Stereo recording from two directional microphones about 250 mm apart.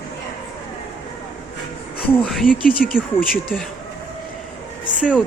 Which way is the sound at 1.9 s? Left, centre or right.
Centre.